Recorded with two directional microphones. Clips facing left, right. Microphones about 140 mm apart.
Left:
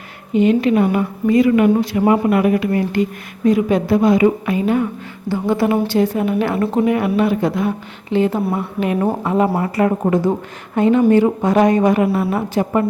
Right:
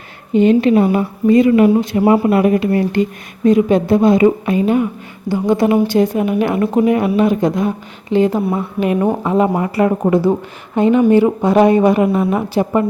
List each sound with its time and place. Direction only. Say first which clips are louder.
0.3 s a woman's voice: right 3 dB; 30° right (ahead or behind)